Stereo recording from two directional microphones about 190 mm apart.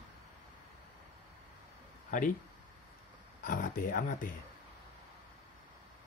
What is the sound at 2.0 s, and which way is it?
Speech, 45° left (ahead or behind).